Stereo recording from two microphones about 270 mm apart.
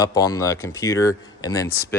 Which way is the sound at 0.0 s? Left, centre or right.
Centre.